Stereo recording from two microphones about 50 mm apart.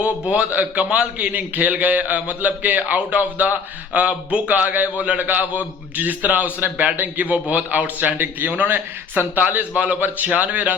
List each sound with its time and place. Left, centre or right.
0.0 s a man's voice: right